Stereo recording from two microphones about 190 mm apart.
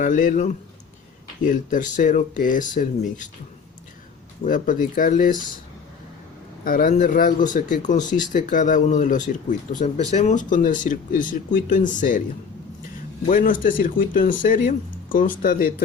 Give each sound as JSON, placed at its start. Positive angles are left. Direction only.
{"t": 0.0, "sound": "speech", "side_deg": 45}
{"t": 4.4, "sound": "speech", "side_deg": 45}
{"t": 6.7, "sound": "speech", "side_deg": 50}
{"t": 13.2, "sound": "speech", "side_deg": 45}